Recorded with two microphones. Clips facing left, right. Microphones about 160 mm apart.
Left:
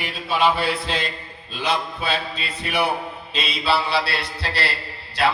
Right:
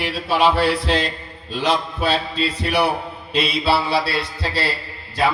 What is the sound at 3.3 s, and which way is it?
Mantra, 65° right (ahead or behind).